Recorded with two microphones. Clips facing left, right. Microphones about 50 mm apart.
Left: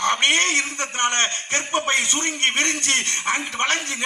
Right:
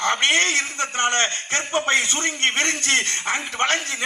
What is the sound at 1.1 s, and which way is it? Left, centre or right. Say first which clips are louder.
A man's voice: right 1 dB; left.